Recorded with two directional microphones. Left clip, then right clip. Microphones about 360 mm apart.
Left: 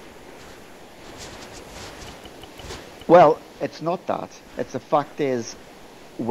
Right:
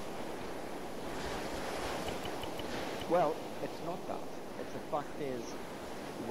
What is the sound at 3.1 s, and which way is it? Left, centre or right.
Speech, left.